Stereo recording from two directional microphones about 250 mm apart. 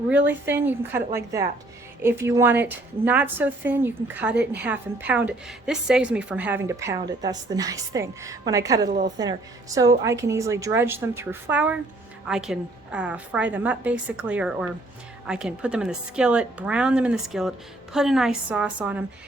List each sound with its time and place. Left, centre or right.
0.1 s a woman's voice: centre
8.9 s a woman's voice: right
9.7 s a woman's voice: centre